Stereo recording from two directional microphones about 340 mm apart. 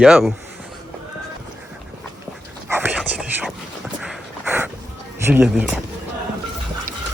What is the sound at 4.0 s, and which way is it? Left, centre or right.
Dog, centre.